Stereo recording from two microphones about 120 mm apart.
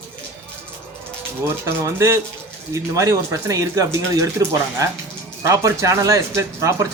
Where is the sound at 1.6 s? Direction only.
25° right (ahead or behind).